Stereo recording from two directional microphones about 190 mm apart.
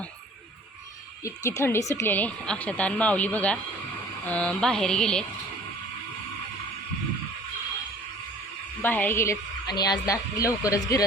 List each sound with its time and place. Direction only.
1.2 s speech: 15° left (ahead or behind)
4.3 s a sound: 5° left (ahead or behind)
8.8 s speech: 10° left (ahead or behind)